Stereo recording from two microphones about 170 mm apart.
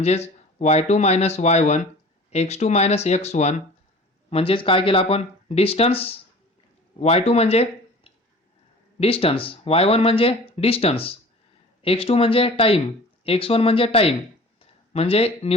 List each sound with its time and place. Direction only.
0.0 s speech: 40° left (ahead or behind)